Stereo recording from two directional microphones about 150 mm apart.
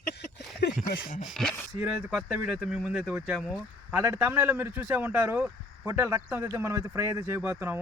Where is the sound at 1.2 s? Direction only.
Centre (ahead or behind).